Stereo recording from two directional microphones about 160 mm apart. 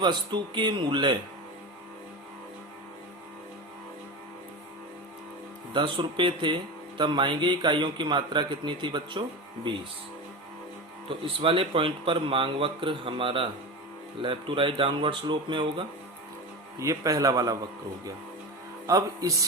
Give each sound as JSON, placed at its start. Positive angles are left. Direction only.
{"t": 0.0, "sound": "speech", "side_deg": -30}
{"t": 5.7, "sound": "speech", "side_deg": -30}
{"t": 11.1, "sound": "speech", "side_deg": -35}
{"t": 16.8, "sound": "speech", "side_deg": -20}
{"t": 18.9, "sound": "speech", "side_deg": -20}